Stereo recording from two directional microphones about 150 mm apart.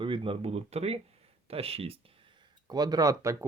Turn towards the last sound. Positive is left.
turn(degrees=-20)  # may be behind; listen again after turning